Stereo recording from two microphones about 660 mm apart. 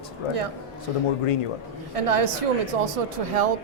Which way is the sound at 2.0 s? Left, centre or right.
Right.